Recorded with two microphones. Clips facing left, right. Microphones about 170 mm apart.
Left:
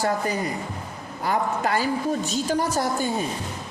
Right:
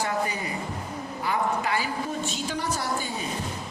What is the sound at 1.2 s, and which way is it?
A woman's voice, 45° left (ahead or behind).